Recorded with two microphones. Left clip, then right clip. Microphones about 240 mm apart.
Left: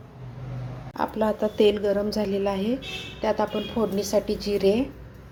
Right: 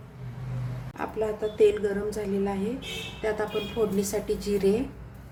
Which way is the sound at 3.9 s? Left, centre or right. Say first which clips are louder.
Left 4 dB; centre.